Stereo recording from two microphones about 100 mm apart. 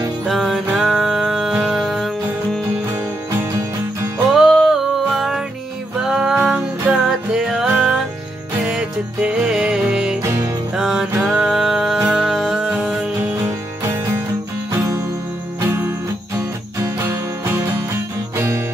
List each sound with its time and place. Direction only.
0.3 s music: centre (ahead or behind)
3.3 s music: 25° right (ahead or behind)
4.3 s music: centre (ahead or behind)
8.6 s music: 10° right (ahead or behind)
10.2 s music: 25° right (ahead or behind)
10.8 s music: 5° right (ahead or behind)
15.6 s music: 20° right (ahead or behind)